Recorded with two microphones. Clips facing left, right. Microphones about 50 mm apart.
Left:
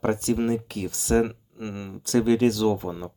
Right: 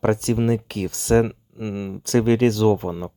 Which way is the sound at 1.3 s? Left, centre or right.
Centre.